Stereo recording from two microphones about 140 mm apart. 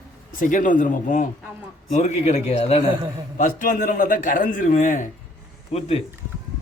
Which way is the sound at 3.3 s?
70° left (ahead or behind).